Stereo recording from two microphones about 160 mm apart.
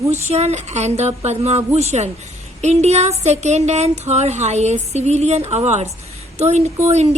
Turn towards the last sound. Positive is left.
turn(degrees=-45)  # may be behind; listen again after turning